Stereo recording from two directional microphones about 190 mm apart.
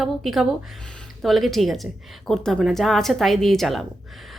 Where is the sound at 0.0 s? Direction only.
Centre (ahead or behind).